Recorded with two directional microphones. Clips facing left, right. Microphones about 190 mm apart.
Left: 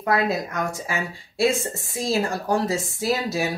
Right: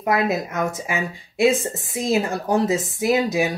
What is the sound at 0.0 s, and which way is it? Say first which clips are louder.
Speech: right 2 dB; 20° right (ahead or behind).